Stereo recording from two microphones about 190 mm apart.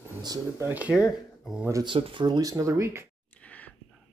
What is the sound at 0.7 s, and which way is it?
Speech, 10° right (ahead or behind).